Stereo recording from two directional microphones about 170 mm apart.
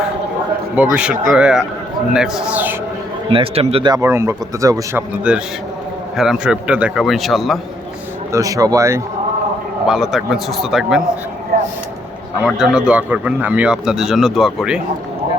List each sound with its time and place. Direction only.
0.8 s speech: 10° right (ahead or behind)
3.3 s a man's voice: 35° right (ahead or behind)
3.9 s speech: 15° right (ahead or behind)
5.3 s speech: 5° right (ahead or behind)
8.3 s speech: 20° right (ahead or behind)
9.8 s speech: centre (ahead or behind)
11.5 s vehicle: 65° right (ahead or behind)
12.5 s speech: centre (ahead or behind)